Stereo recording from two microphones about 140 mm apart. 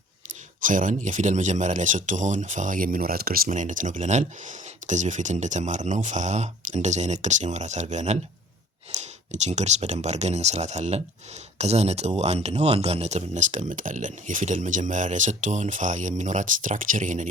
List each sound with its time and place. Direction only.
0.6 s speech: 70° right (ahead or behind)